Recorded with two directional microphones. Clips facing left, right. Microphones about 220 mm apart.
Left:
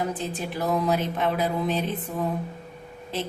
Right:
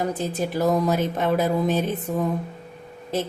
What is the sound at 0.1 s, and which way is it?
Speech, 40° right (ahead or behind).